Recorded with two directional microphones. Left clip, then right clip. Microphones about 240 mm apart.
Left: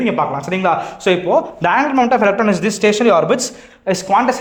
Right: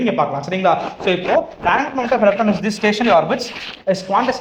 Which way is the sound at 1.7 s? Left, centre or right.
Left.